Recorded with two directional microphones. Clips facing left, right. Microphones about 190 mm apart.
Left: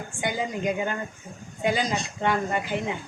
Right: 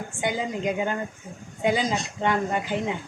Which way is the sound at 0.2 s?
20° right (ahead or behind).